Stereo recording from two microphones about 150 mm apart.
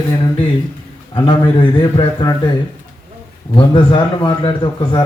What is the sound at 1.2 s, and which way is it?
A man's voice, 30° left (ahead or behind).